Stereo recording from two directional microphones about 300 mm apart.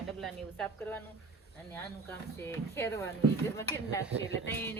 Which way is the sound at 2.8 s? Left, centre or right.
Centre.